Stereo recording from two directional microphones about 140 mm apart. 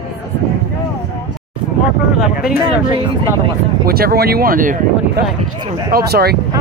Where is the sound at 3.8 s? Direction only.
90° right.